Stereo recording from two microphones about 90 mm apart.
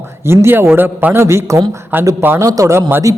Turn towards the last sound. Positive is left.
turn(degrees=-35)  # may be behind; listen again after turning